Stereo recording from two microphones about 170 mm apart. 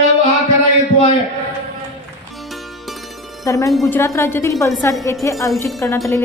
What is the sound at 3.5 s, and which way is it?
Speech, 15° left (ahead or behind).